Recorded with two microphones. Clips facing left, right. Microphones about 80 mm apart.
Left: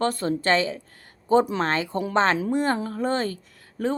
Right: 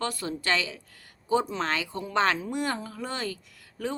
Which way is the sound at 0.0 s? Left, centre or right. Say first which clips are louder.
Left 7 dB; left.